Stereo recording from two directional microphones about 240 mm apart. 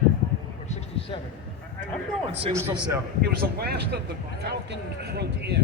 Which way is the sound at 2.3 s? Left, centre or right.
Right.